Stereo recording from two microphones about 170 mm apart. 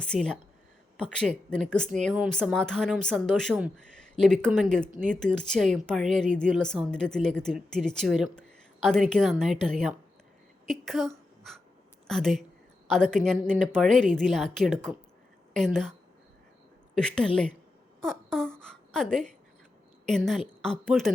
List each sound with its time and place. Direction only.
0.0 s a woman's voice: 5° left (ahead or behind)
18.0 s a sound: 5° left (ahead or behind)
20.1 s a woman's voice: 5° left (ahead or behind)